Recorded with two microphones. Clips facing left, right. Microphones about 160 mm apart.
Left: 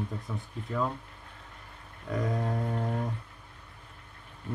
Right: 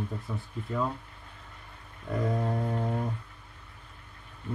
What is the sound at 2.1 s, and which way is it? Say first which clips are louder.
Speech: right 1 dB; centre (ahead or behind).